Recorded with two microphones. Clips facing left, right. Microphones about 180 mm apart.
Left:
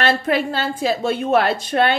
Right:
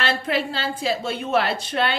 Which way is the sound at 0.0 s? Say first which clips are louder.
Left 5 dB; 50° left (ahead or behind).